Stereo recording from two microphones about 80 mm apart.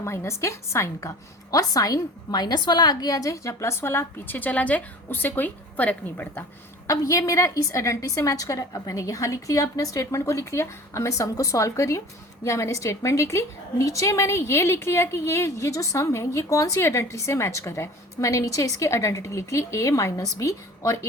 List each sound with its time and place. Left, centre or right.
0.0 s a woman's voice: left
6.8 s a woman's voice: left